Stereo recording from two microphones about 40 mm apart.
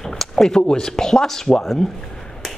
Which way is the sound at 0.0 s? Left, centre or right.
Centre.